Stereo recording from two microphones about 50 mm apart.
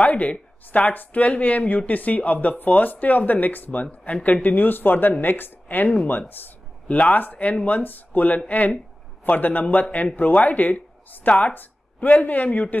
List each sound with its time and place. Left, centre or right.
0.0 s speech: left
6.9 s speech: left